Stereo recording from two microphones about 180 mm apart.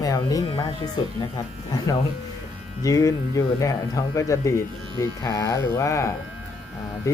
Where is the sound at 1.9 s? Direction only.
20° left (ahead or behind).